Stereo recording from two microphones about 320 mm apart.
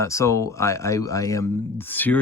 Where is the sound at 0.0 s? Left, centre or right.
Centre.